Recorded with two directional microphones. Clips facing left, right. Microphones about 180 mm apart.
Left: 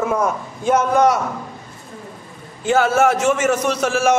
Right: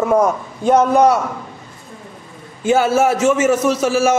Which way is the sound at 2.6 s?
5° right (ahead or behind).